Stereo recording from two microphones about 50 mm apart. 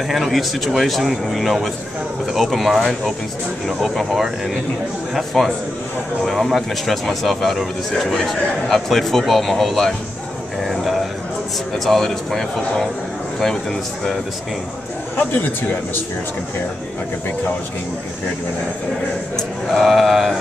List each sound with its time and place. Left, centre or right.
0.1 s speech: centre
10.6 s a sound: centre
11.7 s speech: centre
15.1 s a man's voice: left
19.7 s speech: centre